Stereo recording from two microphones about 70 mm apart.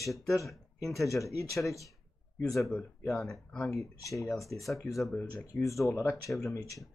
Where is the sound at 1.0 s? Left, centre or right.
Left.